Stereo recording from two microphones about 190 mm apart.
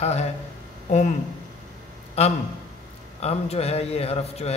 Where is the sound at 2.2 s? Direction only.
35° left (ahead or behind).